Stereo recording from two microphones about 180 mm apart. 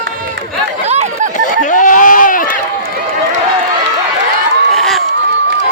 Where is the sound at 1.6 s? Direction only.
45° left (ahead or behind).